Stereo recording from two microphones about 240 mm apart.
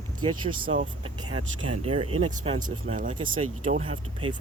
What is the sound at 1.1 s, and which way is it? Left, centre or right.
Speech, centre.